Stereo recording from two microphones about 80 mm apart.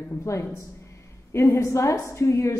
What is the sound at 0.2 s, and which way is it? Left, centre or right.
A woman's voice, left.